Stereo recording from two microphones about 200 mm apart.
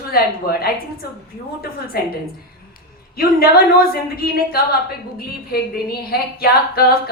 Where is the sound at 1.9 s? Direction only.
50° left (ahead or behind).